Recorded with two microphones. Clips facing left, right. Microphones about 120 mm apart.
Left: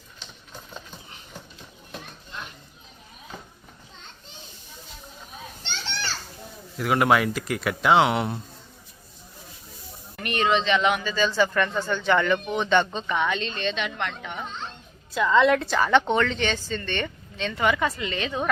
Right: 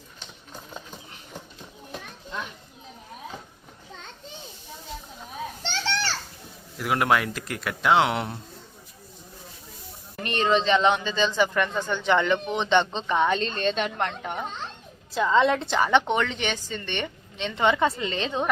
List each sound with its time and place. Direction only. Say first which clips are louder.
5.7 s children playing: right 4 dB; 85° right
6.7 s speech: left 2 dB; centre (ahead or behind)
10.2 s speech: even; 35° right (ahead or behind)